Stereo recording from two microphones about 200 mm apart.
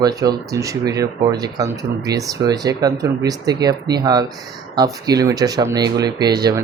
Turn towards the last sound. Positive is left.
turn(degrees=-20)  # may be behind; listen again after turning